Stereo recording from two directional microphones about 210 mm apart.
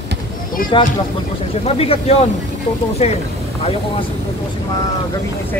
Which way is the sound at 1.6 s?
30° left (ahead or behind).